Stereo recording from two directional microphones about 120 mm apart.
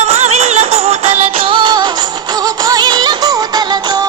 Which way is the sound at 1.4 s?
45° right (ahead or behind).